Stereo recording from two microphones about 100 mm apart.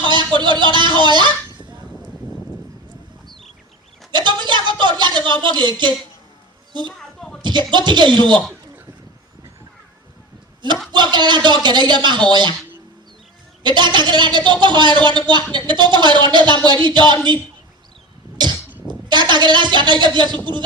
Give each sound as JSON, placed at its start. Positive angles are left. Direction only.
{"t": 0.0, "sound": "speech", "side_deg": -50}
{"t": 4.1, "sound": "a sound", "side_deg": -50}
{"t": 4.8, "sound": "a woman's voice", "side_deg": -50}
{"t": 6.9, "sound": "a sound", "side_deg": 5}
{"t": 7.7, "sound": "a woman's voice", "side_deg": -50}
{"t": 10.9, "sound": "a woman's voice", "side_deg": -50}
{"t": 13.6, "sound": "a woman's voice", "side_deg": -50}
{"t": 18.9, "sound": "a woman's voice", "side_deg": -50}